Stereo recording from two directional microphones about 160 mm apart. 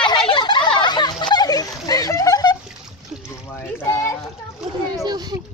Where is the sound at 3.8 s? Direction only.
15° left (ahead or behind).